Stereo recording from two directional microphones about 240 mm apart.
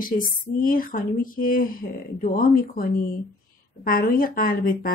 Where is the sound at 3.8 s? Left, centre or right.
Left.